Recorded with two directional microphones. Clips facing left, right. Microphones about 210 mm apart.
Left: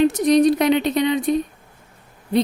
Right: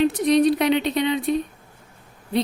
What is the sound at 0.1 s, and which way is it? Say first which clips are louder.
A woman's voice: left 2 dB; 45° left (ahead or behind).